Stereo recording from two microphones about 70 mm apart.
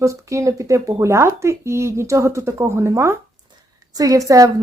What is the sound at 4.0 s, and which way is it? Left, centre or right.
Speech, right.